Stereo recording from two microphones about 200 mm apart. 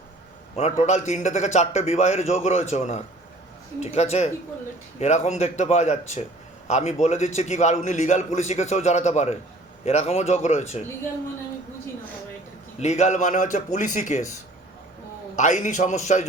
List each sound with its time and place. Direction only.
0.5 s a man's voice: 35° left (ahead or behind)
12.8 s a man's voice: 35° left (ahead or behind)
15.4 s a man's voice: 35° left (ahead or behind)